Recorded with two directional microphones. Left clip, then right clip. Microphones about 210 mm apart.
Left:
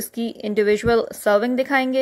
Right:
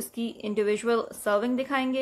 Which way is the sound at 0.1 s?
25° left (ahead or behind).